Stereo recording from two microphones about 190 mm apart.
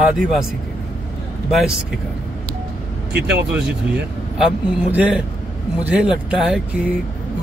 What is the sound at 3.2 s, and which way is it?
Speech, 55° right (ahead or behind).